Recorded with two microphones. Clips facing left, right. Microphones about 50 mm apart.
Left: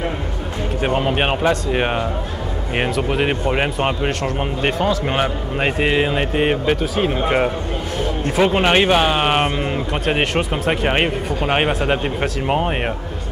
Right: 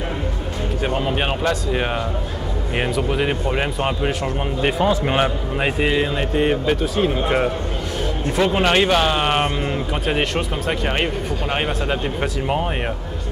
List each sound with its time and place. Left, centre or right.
0.8 s speech: left
4.7 s a man's voice: centre
5.9 s speech: left
6.8 s speech: centre
9.6 s a man's voice: centre
10.7 s speech: left